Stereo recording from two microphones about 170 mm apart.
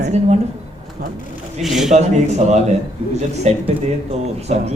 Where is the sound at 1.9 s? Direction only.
40° right (ahead or behind).